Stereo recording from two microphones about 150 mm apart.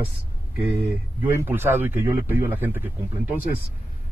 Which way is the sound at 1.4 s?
15° right (ahead or behind).